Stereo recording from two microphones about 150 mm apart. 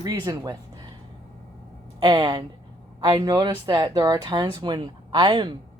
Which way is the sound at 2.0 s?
30° right (ahead or behind).